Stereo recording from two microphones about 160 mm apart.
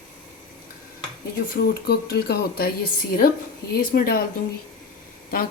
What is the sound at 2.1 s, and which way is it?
Speech, 75° left (ahead or behind).